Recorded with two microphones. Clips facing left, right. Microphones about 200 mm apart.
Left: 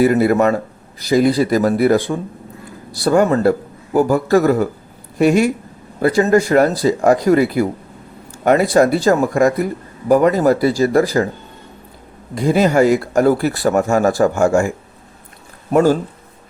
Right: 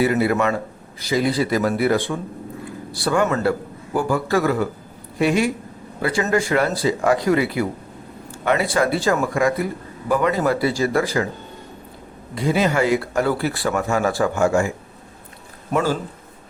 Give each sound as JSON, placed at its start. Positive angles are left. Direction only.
{"t": 0.0, "sound": "speech", "side_deg": 45}
{"t": 12.3, "sound": "speech", "side_deg": 45}
{"t": 15.7, "sound": "speech", "side_deg": 45}